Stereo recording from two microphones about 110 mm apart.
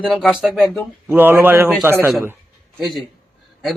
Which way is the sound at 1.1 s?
20° right (ahead or behind).